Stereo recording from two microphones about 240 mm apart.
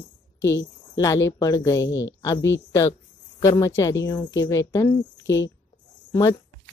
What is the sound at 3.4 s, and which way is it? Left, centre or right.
Speech, centre.